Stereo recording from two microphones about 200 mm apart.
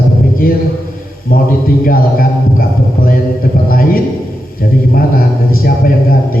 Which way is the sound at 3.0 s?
45° left (ahead or behind).